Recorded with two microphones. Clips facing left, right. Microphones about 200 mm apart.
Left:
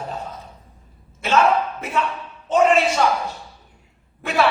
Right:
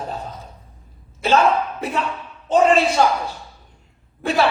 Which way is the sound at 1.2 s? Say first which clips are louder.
Right 1 dB; 35° right (ahead or behind).